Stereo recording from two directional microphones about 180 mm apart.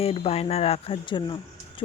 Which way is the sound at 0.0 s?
35° left (ahead or behind).